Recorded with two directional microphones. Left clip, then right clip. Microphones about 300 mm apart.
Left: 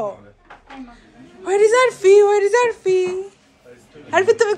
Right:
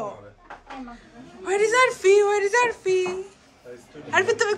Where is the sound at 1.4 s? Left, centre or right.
Centre.